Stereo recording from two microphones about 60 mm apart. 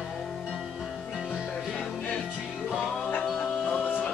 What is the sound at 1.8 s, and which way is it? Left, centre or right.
Music, centre.